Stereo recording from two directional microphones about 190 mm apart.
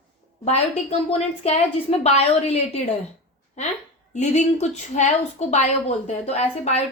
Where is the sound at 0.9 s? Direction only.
30° left (ahead or behind).